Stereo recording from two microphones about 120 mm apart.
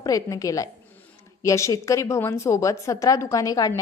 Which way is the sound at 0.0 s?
30° left (ahead or behind).